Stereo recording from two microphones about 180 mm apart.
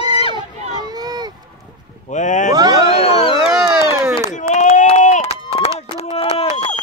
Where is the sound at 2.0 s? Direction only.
45° left (ahead or behind).